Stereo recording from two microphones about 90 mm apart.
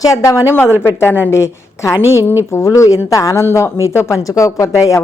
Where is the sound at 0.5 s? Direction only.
25° left (ahead or behind).